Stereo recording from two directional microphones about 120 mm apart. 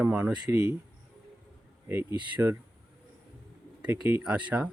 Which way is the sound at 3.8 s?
15° right (ahead or behind).